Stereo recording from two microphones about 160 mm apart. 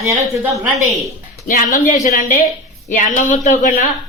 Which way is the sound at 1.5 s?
55° left (ahead or behind).